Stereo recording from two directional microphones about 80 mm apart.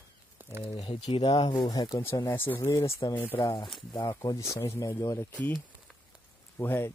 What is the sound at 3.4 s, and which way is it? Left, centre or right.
Speech, left.